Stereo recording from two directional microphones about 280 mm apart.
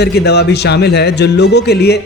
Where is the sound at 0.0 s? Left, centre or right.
Left.